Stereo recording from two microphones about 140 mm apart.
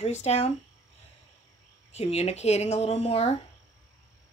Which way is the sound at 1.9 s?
50° left (ahead or behind).